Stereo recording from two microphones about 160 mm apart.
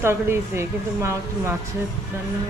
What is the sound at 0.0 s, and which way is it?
A woman's voice, 15° right (ahead or behind).